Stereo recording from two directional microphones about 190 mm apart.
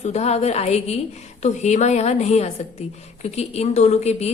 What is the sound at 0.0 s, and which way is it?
Speech, 35° left (ahead or behind).